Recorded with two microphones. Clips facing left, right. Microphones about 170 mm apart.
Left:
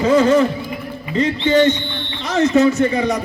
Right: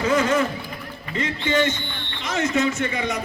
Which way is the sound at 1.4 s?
35° left (ahead or behind).